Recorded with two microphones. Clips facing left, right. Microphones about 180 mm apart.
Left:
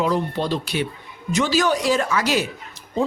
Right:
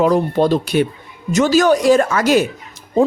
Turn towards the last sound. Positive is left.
turn(degrees=-50)  # may be behind; listen again after turning